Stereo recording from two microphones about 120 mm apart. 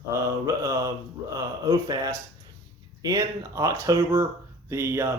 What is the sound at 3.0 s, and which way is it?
Speech, 30° right (ahead or behind).